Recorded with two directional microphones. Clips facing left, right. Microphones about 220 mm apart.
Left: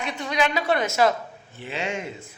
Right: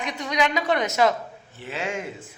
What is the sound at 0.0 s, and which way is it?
A woman's voice, 15° right (ahead or behind).